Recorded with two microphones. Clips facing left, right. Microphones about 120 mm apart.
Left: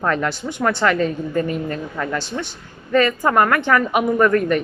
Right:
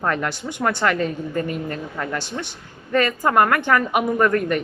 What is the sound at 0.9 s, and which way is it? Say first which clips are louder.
Speech: left 3 dB; 30° left (ahead or behind).